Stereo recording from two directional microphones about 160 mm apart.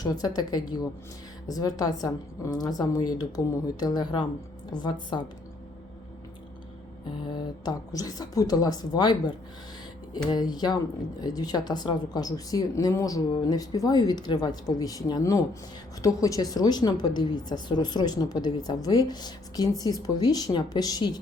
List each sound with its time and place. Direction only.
0.0 s a woman's voice: 25° left (ahead or behind)
7.3 s a woman's voice: 25° left (ahead or behind)